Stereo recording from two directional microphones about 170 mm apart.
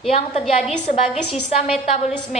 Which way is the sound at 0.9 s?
40° left (ahead or behind).